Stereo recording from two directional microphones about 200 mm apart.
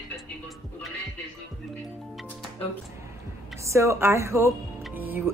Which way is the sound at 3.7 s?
15° right (ahead or behind).